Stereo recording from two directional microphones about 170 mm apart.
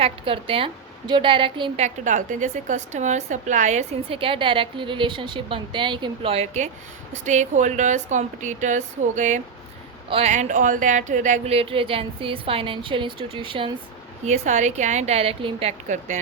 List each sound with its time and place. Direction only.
0.0 s a woman's voice: 30° right (ahead or behind)
14.3 s a woman's voice: 45° right (ahead or behind)